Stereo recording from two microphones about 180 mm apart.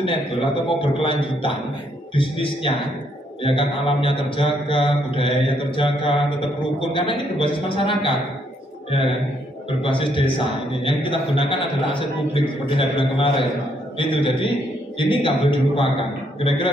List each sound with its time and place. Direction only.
0.0 s a man's voice: 25° left (ahead or behind)
9.8 s a man's voice: 30° left (ahead or behind)